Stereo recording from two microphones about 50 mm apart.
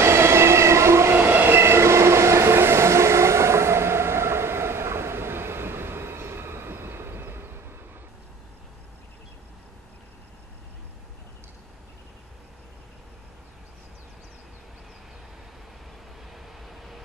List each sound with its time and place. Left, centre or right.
0.0 s train: right
1.1 s train: right
16.3 s vehicle: centre